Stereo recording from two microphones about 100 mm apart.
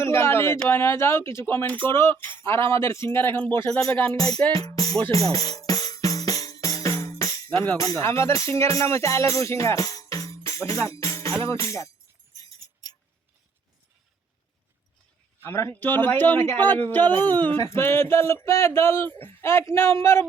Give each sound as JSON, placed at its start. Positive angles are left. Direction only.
{"t": 0.0, "sound": "a sound", "side_deg": 25}
{"t": 0.7, "sound": "speech", "side_deg": 25}
{"t": 3.7, "sound": "speech", "side_deg": 35}
{"t": 3.9, "sound": "music", "side_deg": 20}
{"t": 4.5, "sound": "speech", "side_deg": 35}
{"t": 5.1, "sound": "music", "side_deg": 35}
{"t": 7.8, "sound": "speech", "side_deg": 30}
{"t": 15.4, "sound": "speech", "side_deg": 25}